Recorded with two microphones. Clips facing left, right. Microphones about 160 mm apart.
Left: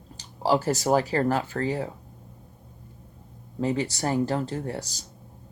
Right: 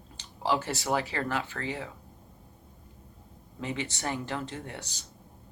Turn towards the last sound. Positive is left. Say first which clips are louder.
# left 8 dB
turn(degrees=40)  # may be behind; listen again after turning